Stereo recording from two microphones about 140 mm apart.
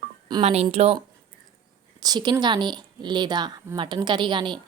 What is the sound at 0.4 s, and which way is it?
Speech, 50° right (ahead or behind).